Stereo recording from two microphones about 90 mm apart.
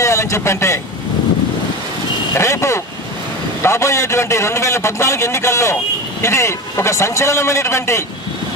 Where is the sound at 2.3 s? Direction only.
35° left (ahead or behind).